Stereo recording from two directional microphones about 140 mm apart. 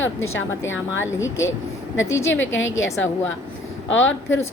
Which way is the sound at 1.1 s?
20° left (ahead or behind).